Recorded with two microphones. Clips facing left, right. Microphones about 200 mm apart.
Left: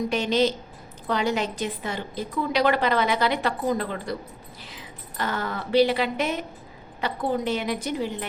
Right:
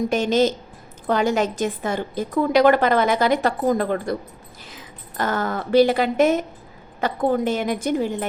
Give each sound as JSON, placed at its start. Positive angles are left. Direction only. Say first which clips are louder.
{"t": 0.1, "sound": "a woman's voice", "louder": "right 3 dB", "side_deg": -45}